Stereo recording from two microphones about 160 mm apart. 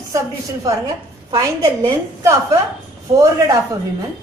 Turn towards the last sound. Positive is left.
turn(degrees=-20)  # may be behind; listen again after turning